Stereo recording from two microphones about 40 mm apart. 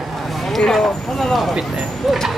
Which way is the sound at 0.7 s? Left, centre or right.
Centre.